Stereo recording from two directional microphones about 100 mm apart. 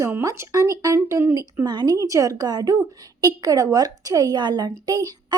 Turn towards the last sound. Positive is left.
turn(degrees=-40)  # may be behind; listen again after turning